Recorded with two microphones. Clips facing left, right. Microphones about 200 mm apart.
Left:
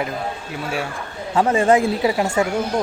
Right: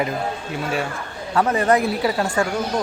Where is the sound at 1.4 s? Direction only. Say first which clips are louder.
Left 2 dB; 25° left (ahead or behind).